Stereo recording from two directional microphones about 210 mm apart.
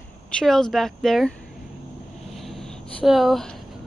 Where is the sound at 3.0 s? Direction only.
Centre (ahead or behind).